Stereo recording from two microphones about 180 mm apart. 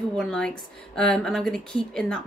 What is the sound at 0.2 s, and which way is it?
Speech, 5° left (ahead or behind).